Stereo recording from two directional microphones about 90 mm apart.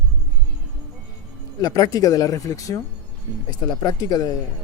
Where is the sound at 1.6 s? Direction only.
45° left (ahead or behind).